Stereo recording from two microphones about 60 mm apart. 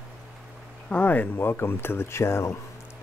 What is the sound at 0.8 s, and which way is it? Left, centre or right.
Speech, left.